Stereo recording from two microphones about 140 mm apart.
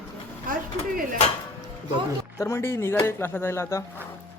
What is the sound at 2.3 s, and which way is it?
Speech, 20° left (ahead or behind).